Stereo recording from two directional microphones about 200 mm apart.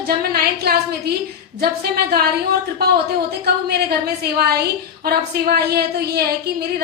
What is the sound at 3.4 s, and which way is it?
A woman's voice, 50° right (ahead or behind).